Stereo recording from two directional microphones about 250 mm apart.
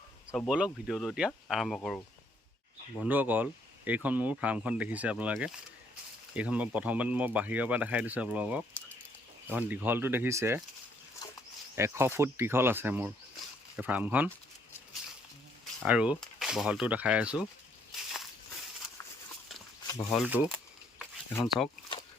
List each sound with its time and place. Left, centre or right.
0.3 s speech: centre
11.2 s wild animals: centre
11.8 s speech: centre
15.8 s speech: centre
20.1 s speech: centre
21.0 s a sound: centre